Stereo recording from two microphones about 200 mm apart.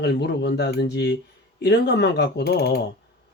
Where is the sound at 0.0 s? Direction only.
55° left (ahead or behind).